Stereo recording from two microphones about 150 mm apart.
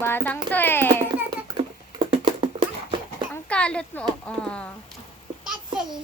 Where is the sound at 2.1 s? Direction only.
35° right (ahead or behind).